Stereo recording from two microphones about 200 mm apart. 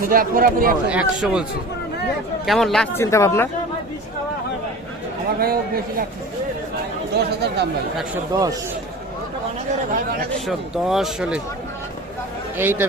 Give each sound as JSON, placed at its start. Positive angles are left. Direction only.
{"t": 0.1, "sound": "a man's voice", "side_deg": -45}
{"t": 0.9, "sound": "speech", "side_deg": -5}
{"t": 2.5, "sound": "speech", "side_deg": 0}
{"t": 5.4, "sound": "a man's voice", "side_deg": -50}
{"t": 7.2, "sound": "speech", "side_deg": -55}
{"t": 8.3, "sound": "speech", "side_deg": -20}
{"t": 10.4, "sound": "speech", "side_deg": 0}
{"t": 12.5, "sound": "speech", "side_deg": -10}